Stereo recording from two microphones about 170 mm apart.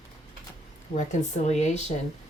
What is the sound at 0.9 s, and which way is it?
Speech, 45° left (ahead or behind).